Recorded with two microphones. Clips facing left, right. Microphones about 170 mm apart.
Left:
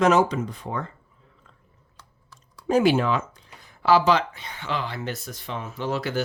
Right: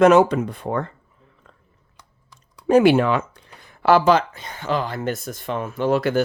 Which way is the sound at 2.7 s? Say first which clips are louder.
Right 5 dB; 65° right (ahead or behind).